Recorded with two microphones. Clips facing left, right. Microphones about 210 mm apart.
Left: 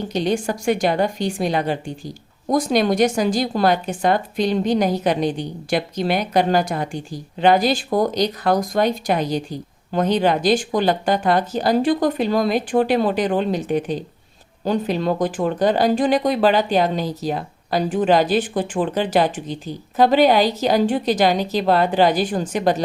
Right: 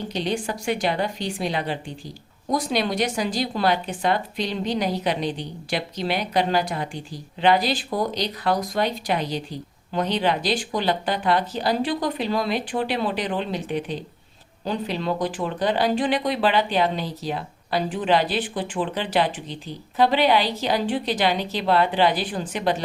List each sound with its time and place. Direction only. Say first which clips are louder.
0.1 s speech: left 6 dB; 45° left (ahead or behind)